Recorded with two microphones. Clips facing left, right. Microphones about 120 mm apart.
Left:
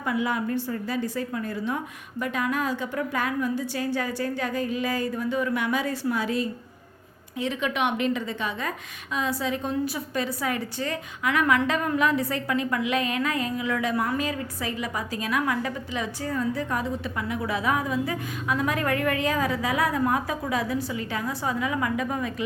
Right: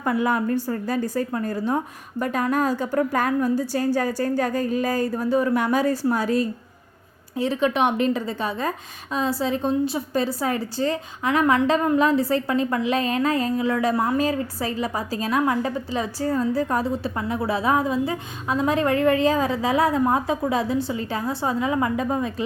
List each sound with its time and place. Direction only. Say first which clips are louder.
0.0 s a woman's voice: right 4 dB; 45° right (ahead or behind); by 22.4 s 30° right (ahead or behind)